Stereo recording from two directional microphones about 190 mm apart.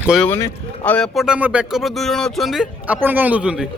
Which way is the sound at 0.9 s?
Centre (ahead or behind).